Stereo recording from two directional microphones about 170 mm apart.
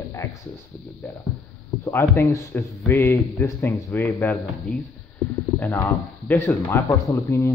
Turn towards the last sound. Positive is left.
turn(degrees=15)  # may be behind; listen again after turning